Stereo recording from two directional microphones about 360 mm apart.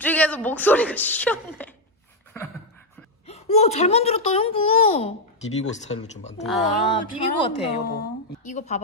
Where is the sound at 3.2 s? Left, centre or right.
Centre.